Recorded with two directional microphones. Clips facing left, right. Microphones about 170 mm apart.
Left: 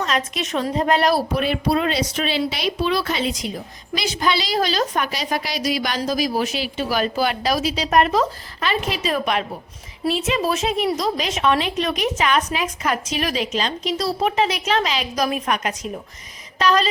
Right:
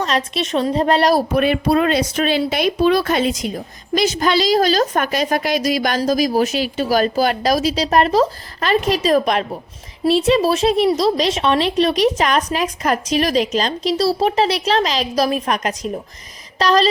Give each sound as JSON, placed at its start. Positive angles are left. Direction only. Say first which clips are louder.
{"t": 0.0, "sound": "speech", "louder": "right 3 dB", "side_deg": -30}
{"t": 1.4, "sound": "speech", "louder": "right 5 dB", "side_deg": -55}